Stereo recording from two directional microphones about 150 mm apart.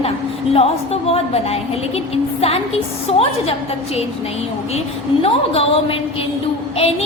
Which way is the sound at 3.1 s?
40° left (ahead or behind).